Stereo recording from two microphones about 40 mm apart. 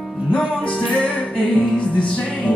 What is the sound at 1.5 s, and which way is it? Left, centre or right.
Music, left.